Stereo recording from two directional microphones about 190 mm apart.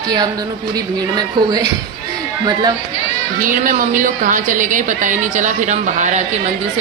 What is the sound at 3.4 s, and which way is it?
A woman's voice, 45° right (ahead or behind).